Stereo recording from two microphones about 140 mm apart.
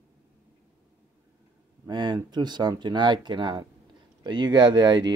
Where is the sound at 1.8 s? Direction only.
30° right (ahead or behind).